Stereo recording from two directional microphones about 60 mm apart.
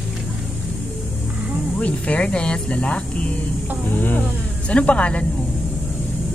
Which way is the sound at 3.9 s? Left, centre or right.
Left.